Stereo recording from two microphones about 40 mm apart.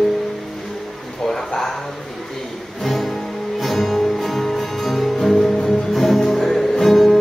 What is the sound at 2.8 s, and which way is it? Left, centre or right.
Music, centre.